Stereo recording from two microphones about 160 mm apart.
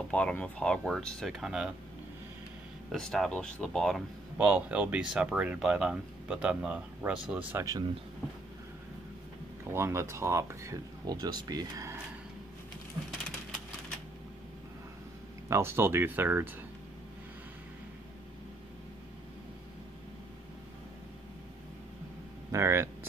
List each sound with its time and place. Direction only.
0.1 s speech: 10° left (ahead or behind)
2.9 s speech: 5° left (ahead or behind)
4.5 s speech: 10° right (ahead or behind)
7.5 s speech: 20° right (ahead or behind)
9.7 s speech: 15° right (ahead or behind)
15.4 s speech: 15° right (ahead or behind)
22.5 s speech: 15° right (ahead or behind)